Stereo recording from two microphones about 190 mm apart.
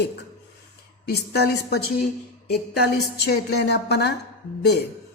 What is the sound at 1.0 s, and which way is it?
Speech, 60° left (ahead or behind).